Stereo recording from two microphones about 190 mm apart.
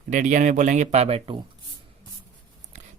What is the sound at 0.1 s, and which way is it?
Speech, 40° right (ahead or behind).